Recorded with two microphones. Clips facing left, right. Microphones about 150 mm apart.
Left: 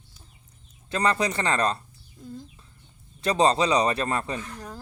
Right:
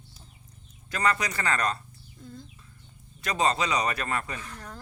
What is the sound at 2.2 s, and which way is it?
Chicken, 10° left (ahead or behind).